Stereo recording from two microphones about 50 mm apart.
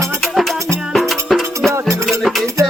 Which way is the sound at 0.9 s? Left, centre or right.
Centre.